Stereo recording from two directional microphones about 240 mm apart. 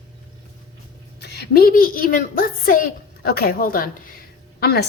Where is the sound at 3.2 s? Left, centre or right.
Left.